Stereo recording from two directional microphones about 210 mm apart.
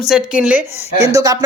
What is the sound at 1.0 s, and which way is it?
Speech, 15° right (ahead or behind).